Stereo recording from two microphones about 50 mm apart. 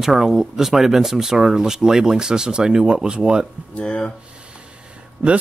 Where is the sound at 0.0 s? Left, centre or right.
Centre.